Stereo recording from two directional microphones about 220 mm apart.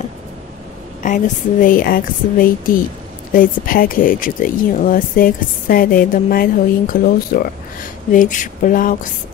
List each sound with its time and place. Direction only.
1.0 s speech: 35° left (ahead or behind)